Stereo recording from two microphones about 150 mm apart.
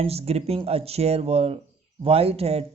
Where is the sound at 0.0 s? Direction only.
40° right (ahead or behind).